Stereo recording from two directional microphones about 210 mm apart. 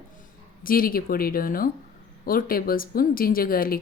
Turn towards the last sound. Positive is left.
turn(degrees=45)  # may be behind; listen again after turning